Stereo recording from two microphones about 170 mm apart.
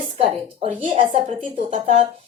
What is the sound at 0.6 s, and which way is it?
A woman's voice, 35° right (ahead or behind).